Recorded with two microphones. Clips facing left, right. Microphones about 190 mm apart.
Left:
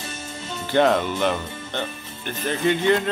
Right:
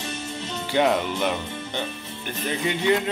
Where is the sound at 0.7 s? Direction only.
15° right (ahead or behind).